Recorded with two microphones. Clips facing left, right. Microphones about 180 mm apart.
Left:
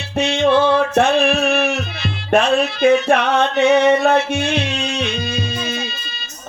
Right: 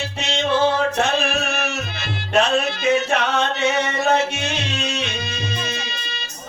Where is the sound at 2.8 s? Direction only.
55° left (ahead or behind).